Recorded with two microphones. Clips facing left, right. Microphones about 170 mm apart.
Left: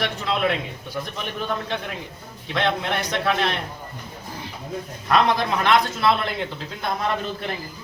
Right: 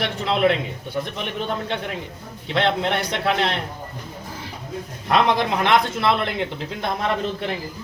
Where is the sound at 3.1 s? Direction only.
25° right (ahead or behind).